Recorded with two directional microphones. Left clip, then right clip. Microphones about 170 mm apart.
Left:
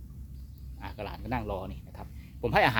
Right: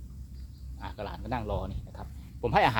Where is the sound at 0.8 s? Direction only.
10° left (ahead or behind).